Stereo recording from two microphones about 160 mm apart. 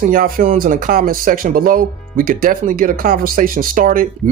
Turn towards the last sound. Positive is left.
turn(degrees=-50)  # may be behind; listen again after turning